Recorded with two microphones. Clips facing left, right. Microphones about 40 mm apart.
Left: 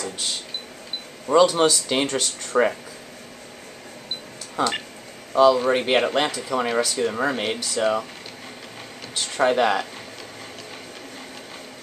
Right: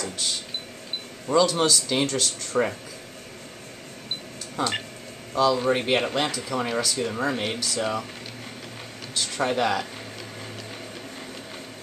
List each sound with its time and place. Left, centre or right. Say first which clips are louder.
1.4 s speech: left 4 dB; left
4.6 s speech: left 3 dB; left
5.6 s speech: left 3 dB; centre
9.1 s speech: left 5 dB; centre